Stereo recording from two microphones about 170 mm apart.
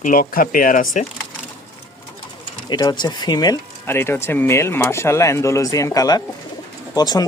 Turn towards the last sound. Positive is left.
turn(degrees=25)  # may be behind; listen again after turning